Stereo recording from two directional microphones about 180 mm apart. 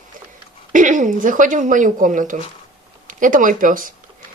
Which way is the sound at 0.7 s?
45° right (ahead or behind).